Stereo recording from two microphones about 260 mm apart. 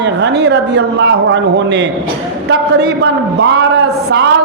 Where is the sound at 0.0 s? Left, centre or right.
Right.